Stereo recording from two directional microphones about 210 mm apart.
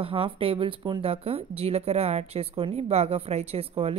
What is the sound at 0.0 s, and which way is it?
Speech, 25° right (ahead or behind).